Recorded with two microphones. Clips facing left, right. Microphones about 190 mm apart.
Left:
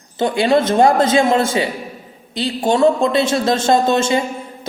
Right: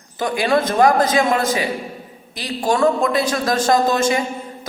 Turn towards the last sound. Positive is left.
turn(degrees=25)  # may be behind; listen again after turning